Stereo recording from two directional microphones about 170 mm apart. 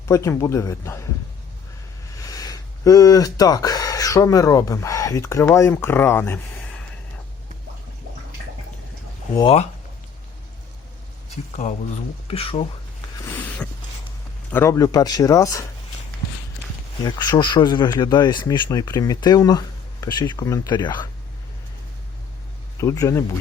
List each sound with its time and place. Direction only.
0.1 s a man's voice: 15° left (ahead or behind)
2.1 s speech: 20° left (ahead or behind)
9.4 s speech: 35° left (ahead or behind)
12.3 s speech: 35° left (ahead or behind)
13.1 s a sound: 15° left (ahead or behind)
14.5 s speech: 15° left (ahead or behind)
17.0 s speech: 25° left (ahead or behind)
22.8 s speech: 20° left (ahead or behind)